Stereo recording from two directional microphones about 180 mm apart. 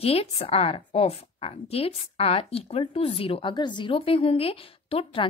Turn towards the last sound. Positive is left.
turn(degrees=30)  # may be behind; listen again after turning